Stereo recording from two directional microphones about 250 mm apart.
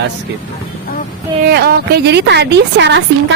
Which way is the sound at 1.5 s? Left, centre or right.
Right.